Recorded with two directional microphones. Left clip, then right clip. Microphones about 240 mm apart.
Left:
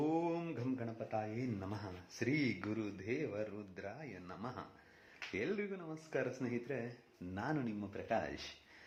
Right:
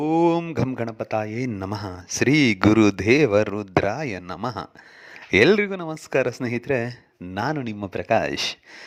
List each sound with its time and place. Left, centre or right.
0.0 s speech: right